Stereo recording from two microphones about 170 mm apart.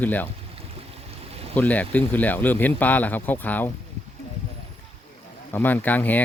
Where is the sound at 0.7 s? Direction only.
35° right (ahead or behind).